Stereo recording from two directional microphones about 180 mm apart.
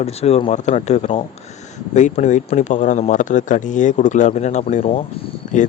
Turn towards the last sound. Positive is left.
turn(degrees=40)  # may be behind; listen again after turning